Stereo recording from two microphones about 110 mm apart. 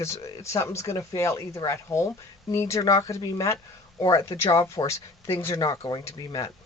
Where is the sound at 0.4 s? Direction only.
25° left (ahead or behind).